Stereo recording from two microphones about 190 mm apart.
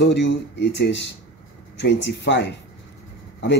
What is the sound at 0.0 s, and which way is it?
Speech, 70° left (ahead or behind).